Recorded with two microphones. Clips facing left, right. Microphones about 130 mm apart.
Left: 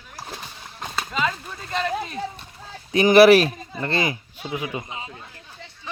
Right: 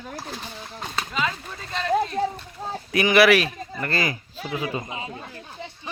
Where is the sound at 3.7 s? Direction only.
25° left (ahead or behind).